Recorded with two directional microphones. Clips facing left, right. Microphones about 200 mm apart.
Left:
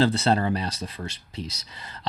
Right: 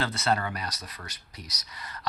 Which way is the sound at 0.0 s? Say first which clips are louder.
Left 7 dB; 30° left (ahead or behind).